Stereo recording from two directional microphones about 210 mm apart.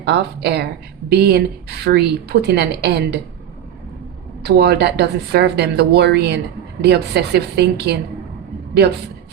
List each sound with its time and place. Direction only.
0.0 s speech: 50° right (ahead or behind)
4.4 s speech: 50° right (ahead or behind)